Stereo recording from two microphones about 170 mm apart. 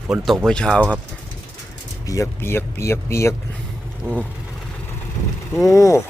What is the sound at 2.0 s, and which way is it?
Speech, 20° left (ahead or behind).